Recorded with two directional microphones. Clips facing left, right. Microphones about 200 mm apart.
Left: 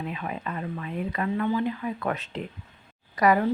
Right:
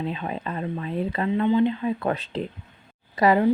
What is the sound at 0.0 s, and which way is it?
Speech, 30° right (ahead or behind).